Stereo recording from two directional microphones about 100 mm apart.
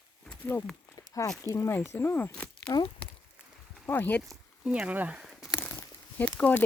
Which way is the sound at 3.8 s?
20° left (ahead or behind).